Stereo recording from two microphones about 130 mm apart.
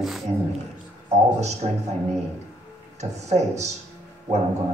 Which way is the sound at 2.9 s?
60° right (ahead or behind).